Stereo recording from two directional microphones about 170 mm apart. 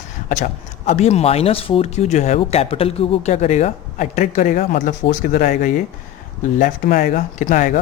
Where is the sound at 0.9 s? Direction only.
40° left (ahead or behind).